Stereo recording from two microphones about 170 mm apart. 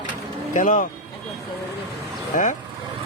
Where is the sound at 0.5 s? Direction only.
50° left (ahead or behind).